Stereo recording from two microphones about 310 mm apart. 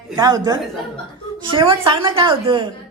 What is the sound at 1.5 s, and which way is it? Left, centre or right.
A man's voice, centre.